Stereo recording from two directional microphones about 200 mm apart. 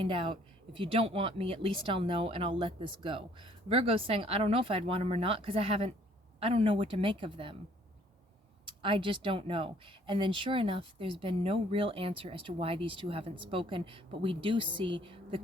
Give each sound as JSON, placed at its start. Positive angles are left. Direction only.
{"t": 0.0, "sound": "speech", "side_deg": -25}
{"t": 8.6, "sound": "speech", "side_deg": -25}